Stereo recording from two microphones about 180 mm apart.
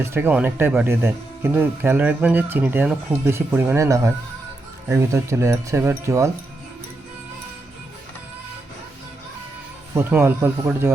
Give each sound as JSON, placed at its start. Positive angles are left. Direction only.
{"t": 0.0, "sound": "speech", "side_deg": -10}
{"t": 9.9, "sound": "speech", "side_deg": -15}